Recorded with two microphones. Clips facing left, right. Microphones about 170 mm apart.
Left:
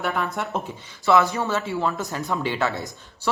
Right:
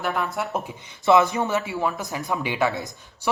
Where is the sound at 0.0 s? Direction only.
Centre (ahead or behind).